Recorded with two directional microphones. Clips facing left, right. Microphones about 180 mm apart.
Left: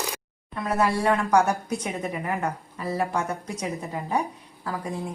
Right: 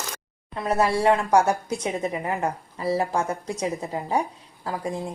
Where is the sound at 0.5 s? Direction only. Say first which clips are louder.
Right 2 dB; 30° right (ahead or behind).